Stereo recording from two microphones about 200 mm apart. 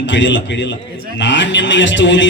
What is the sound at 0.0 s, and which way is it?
A man's voice, 65° left (ahead or behind).